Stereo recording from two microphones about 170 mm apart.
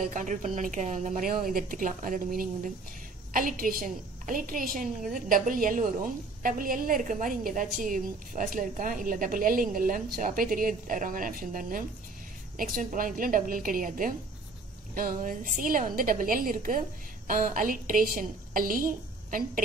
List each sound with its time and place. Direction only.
0.1 s a woman's voice: 50° right (ahead or behind)